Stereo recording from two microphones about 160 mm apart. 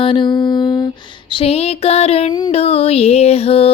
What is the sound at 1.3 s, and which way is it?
Music, 35° left (ahead or behind).